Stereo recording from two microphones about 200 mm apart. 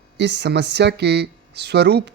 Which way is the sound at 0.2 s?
60° right (ahead or behind).